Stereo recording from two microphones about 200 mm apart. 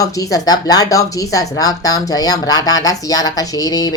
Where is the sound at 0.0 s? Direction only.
15° left (ahead or behind).